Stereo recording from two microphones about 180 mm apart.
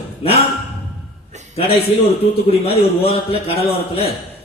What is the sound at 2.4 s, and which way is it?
A man's voice, 30° left (ahead or behind).